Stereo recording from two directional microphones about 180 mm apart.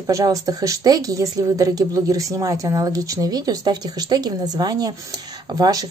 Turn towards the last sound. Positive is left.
turn(degrees=-20)  # may be behind; listen again after turning